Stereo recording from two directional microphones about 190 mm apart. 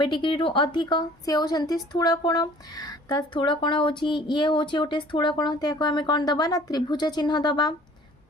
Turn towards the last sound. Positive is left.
turn(degrees=20)  # may be behind; listen again after turning